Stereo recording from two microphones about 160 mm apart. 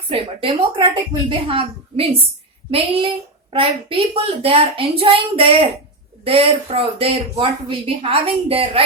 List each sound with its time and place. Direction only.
0.1 s speech: 35° right (ahead or behind)